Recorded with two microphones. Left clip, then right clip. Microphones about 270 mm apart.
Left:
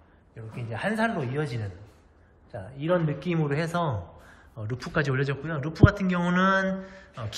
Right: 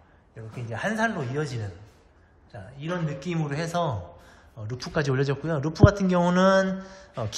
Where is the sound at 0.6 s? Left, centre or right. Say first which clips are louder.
Right 1 dB; centre.